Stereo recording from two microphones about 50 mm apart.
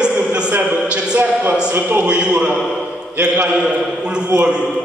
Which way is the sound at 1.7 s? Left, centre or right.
Right.